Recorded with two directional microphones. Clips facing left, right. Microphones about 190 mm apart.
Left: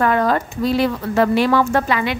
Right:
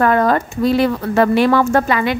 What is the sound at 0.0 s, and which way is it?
A woman's voice, 50° right (ahead or behind).